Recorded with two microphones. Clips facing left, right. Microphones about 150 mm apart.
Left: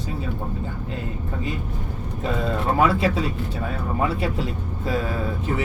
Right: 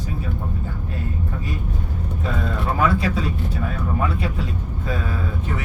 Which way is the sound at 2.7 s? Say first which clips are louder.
Left 1 dB; 30° left (ahead or behind).